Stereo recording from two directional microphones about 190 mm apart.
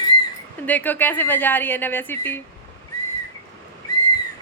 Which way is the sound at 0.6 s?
10° left (ahead or behind).